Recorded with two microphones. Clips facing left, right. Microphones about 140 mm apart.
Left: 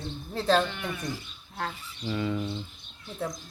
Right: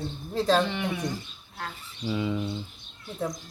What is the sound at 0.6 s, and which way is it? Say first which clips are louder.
Speech: right 4 dB; 75° right (ahead or behind).